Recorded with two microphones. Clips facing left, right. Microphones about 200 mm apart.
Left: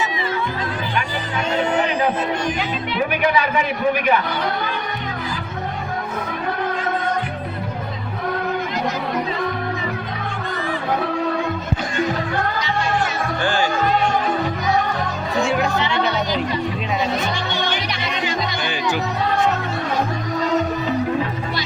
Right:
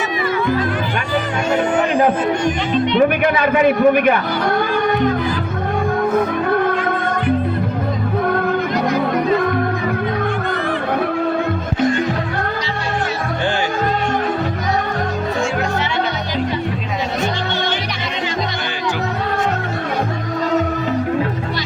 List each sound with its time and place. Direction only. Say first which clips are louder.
1.5 s music: right 4 dB; 50° right (ahead or behind)
3.2 s speech: right 5 dB; 50° right (ahead or behind)